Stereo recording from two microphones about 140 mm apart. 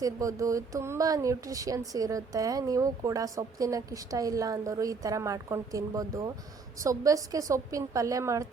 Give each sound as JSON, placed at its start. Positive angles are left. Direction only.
{"t": 0.0, "sound": "speech", "side_deg": -25}